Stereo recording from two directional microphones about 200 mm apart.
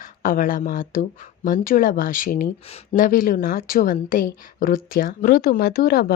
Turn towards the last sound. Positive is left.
turn(degrees=50)  # may be behind; listen again after turning